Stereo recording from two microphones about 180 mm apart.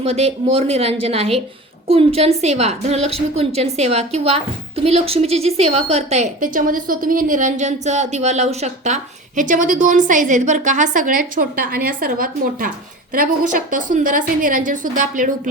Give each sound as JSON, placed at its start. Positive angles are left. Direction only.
{"t": 0.0, "sound": "a woman's voice", "side_deg": -35}